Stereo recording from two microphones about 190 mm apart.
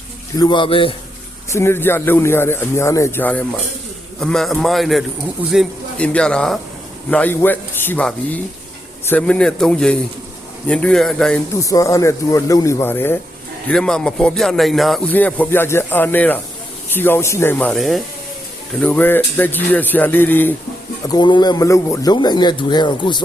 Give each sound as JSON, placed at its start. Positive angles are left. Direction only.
{"t": 0.3, "sound": "a man's voice", "side_deg": 25}
{"t": 1.5, "sound": "a man's voice", "side_deg": 15}
{"t": 11.6, "sound": "a man's voice", "side_deg": 15}
{"t": 21.1, "sound": "a man's voice", "side_deg": 25}